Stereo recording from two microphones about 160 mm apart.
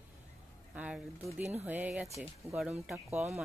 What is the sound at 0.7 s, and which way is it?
Speech, 10° right (ahead or behind).